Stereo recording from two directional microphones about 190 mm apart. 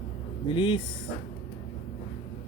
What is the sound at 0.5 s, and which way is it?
Speech, 25° left (ahead or behind).